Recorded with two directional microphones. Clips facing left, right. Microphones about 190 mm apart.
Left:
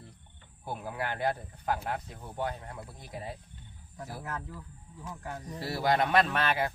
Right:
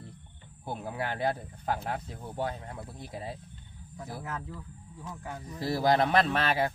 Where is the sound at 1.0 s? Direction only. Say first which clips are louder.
Right 1 dB; 25° right (ahead or behind).